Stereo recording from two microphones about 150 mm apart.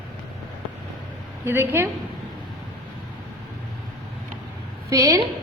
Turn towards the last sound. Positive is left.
turn(degrees=-20)  # may be behind; listen again after turning